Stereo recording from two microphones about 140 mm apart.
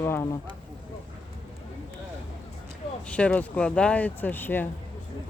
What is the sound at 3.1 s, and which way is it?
Speech, 10° left (ahead or behind).